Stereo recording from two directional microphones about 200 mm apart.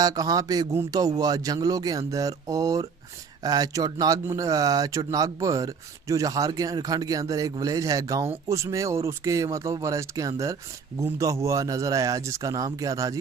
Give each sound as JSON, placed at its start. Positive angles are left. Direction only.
{"t": 0.0, "sound": "speech", "side_deg": -15}